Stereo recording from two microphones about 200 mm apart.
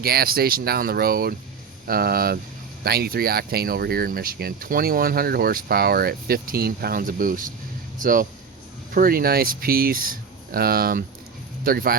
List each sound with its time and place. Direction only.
0.0 s speech: 50° right (ahead or behind)